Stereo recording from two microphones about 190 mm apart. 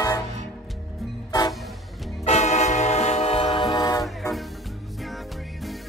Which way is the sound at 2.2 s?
35° left (ahead or behind).